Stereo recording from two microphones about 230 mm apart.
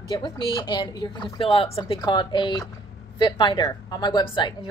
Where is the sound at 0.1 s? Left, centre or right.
Centre.